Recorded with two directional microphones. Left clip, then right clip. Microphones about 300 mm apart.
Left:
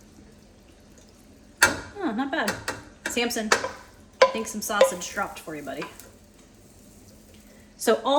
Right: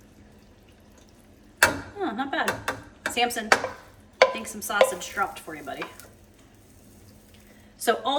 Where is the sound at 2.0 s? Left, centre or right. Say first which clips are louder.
Even; centre.